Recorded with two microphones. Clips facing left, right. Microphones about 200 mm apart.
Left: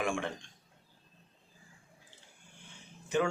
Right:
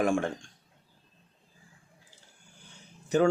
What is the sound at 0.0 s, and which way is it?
Speech, 40° right (ahead or behind).